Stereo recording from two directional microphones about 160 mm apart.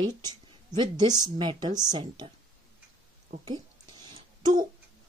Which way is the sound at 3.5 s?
25° right (ahead or behind).